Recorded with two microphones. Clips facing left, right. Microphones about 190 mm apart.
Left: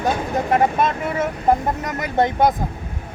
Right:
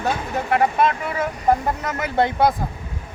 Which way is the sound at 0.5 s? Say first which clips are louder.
Even; 20° left (ahead or behind).